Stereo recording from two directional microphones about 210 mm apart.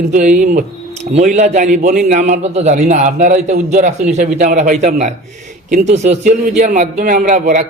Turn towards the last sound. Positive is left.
turn(degrees=-35)  # may be behind; listen again after turning